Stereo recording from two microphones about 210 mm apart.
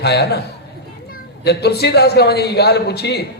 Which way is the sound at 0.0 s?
50° left (ahead or behind).